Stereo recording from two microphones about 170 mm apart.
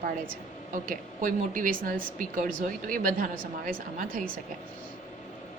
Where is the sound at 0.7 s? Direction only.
55° right (ahead or behind).